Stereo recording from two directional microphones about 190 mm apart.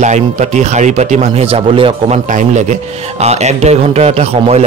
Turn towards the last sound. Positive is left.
turn(degrees=-35)  # may be behind; listen again after turning